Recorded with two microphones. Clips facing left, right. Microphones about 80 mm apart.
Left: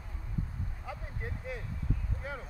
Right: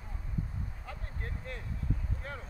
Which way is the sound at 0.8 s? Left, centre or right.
Centre.